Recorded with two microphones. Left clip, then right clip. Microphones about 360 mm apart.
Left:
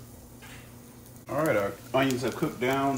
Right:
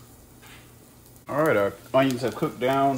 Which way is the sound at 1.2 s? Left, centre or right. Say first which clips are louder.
Right 5 dB; right.